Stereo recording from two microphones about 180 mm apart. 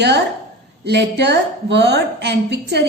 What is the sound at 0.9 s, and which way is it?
A woman's voice, 70° right (ahead or behind).